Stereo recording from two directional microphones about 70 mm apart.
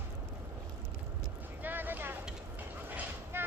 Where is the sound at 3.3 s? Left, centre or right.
Right.